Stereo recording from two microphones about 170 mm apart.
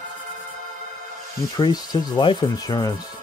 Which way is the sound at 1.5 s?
25° left (ahead or behind).